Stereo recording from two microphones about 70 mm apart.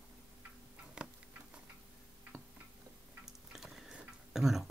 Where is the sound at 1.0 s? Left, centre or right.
Centre.